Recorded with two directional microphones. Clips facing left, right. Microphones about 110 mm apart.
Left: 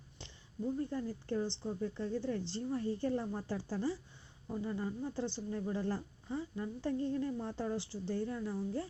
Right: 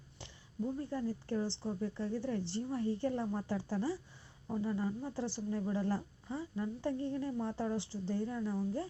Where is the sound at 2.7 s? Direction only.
20° right (ahead or behind).